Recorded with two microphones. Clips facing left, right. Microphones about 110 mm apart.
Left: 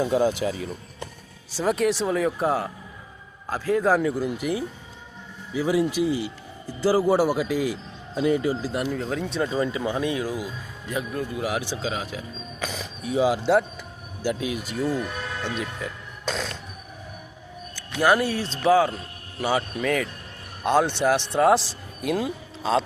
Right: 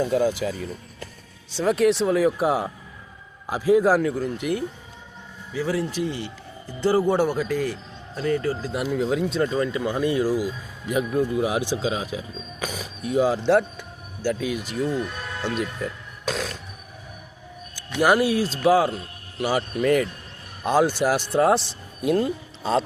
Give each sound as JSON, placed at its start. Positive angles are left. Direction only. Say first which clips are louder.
{"t": 0.0, "sound": "speech", "louder": "even", "side_deg": 20}
{"t": 1.5, "sound": "a man's voice", "louder": "right 3 dB", "side_deg": 0}
{"t": 8.7, "sound": "a man's voice", "louder": "right 3 dB", "side_deg": -5}
{"t": 10.8, "sound": "speech", "louder": "right 6 dB", "side_deg": -15}
{"t": 13.1, "sound": "a man's voice", "louder": "right 1 dB", "side_deg": 5}
{"t": 14.3, "sound": "a man's voice", "louder": "right 2 dB", "side_deg": 15}
{"t": 15.4, "sound": "speech", "louder": "right 7 dB", "side_deg": -5}
{"t": 18.0, "sound": "a man's voice", "louder": "right 2 dB", "side_deg": -10}